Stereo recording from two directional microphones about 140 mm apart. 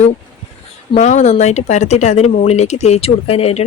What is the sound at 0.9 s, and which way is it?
Speech, 55° left (ahead or behind).